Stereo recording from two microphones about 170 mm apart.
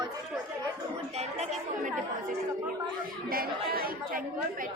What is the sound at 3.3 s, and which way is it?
Speech, 60° right (ahead or behind).